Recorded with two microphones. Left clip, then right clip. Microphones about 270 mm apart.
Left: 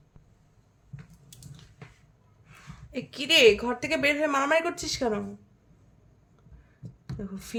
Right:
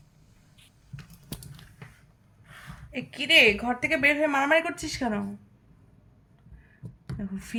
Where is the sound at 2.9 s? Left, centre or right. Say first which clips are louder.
Right 2 dB; centre.